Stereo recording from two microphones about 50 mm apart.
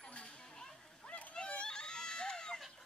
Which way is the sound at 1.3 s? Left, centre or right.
Centre.